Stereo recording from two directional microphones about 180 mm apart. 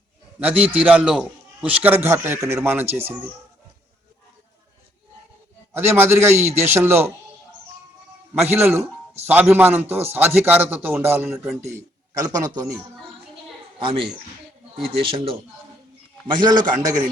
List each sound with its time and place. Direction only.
0.6 s a man's voice: 5° right (ahead or behind)
5.7 s a man's voice: 15° right (ahead or behind)
8.4 s a man's voice: 10° right (ahead or behind)
13.7 s a child's voice: 25° right (ahead or behind)
15.0 s a man's voice: 30° right (ahead or behind)